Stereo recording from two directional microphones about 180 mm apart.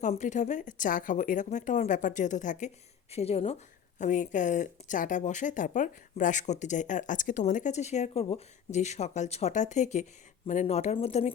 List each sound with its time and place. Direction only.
0.0 s speech: 40° left (ahead or behind)